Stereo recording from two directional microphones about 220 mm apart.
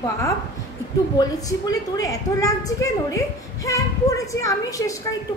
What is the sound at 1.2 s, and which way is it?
A woman's voice, 20° left (ahead or behind).